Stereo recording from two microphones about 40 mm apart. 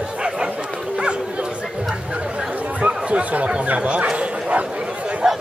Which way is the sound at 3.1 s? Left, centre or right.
Right.